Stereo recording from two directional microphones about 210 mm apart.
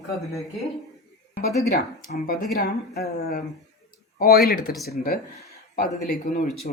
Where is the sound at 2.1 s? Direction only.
45° left (ahead or behind).